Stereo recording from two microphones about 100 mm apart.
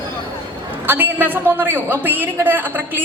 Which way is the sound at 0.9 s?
20° right (ahead or behind).